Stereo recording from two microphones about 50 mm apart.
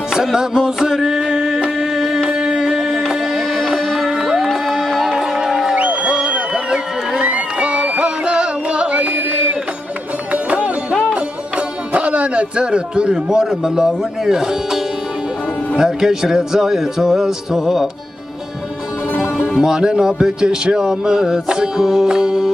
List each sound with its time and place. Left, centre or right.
0.1 s music: centre
3.3 s music: centre
4.5 s music: centre
5.0 s music: centre
5.8 s music: right
6.3 s a sound: centre
7.2 s music: right
11.9 s a man's voice: right; by 14.8 s centre
15.8 s music: centre
19.5 s music: centre